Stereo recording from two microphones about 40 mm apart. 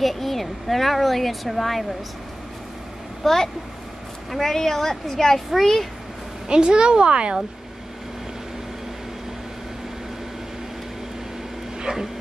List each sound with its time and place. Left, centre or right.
0.0 s speech: centre
3.2 s a woman's voice: centre
6.5 s a woman's voice: right
11.8 s dog: centre